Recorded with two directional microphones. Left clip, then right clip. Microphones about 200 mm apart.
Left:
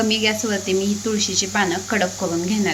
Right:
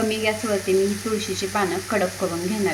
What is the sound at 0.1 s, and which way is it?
Speech, centre (ahead or behind).